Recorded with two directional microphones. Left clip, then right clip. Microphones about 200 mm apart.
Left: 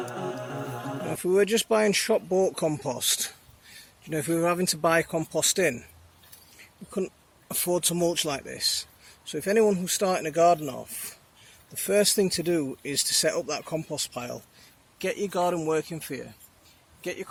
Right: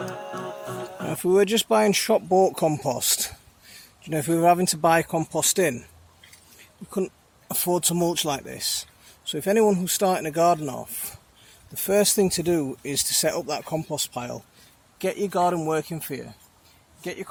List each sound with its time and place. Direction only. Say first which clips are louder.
1.1 s speech: right 3 dB; 35° right (ahead or behind)
10.6 s a man's voice: right 3 dB; 45° right (ahead or behind)